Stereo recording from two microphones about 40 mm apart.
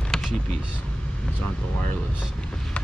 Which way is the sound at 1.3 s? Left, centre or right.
Left.